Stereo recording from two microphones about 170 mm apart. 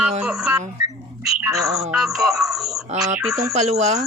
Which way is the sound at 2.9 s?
40° right (ahead or behind).